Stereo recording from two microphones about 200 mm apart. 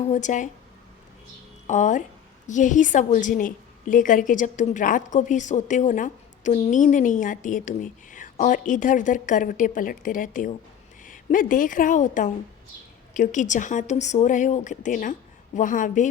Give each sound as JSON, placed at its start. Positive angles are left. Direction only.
{"t": 0.0, "sound": "a woman's voice", "side_deg": 35}
{"t": 1.6, "sound": "a woman's voice", "side_deg": 40}